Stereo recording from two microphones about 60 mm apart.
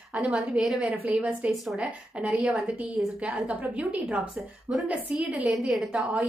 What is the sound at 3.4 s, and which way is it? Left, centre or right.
Speech, right.